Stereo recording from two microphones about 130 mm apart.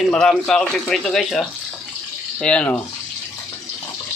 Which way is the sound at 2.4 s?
10° left (ahead or behind).